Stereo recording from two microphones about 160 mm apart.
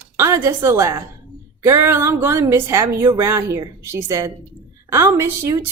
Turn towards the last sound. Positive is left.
turn(degrees=-15)  # may be behind; listen again after turning